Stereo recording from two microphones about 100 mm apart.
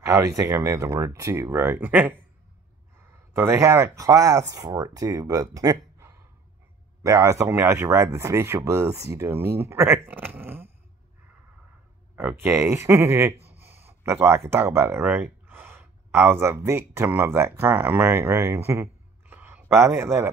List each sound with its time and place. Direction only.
0.0 s speech: 35° right (ahead or behind)
12.2 s speech: 25° right (ahead or behind)
13.6 s gasp: 20° right (ahead or behind)
14.5 s speech: 25° right (ahead or behind)